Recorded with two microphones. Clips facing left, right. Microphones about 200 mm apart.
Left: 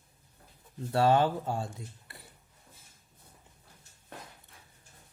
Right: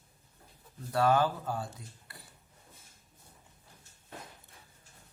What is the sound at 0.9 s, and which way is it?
Speech, 25° left (ahead or behind).